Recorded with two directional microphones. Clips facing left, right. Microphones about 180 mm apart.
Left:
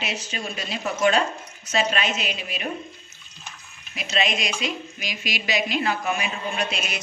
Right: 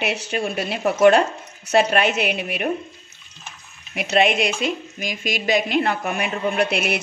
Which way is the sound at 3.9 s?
60° right (ahead or behind).